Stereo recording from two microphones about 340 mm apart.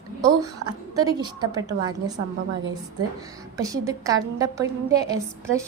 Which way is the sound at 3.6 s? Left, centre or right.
Centre.